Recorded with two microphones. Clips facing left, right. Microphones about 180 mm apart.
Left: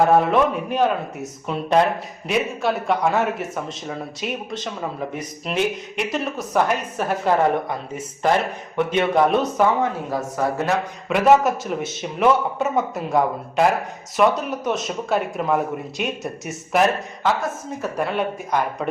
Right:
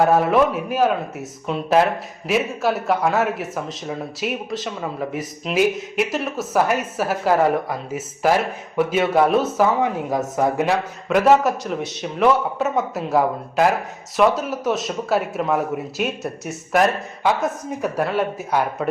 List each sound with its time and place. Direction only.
0.0 s speech: 5° right (ahead or behind)
9.8 s speech: 15° right (ahead or behind)
11.1 s speech: centre (ahead or behind)
17.2 s speech: 15° right (ahead or behind)
18.0 s speech: 5° right (ahead or behind)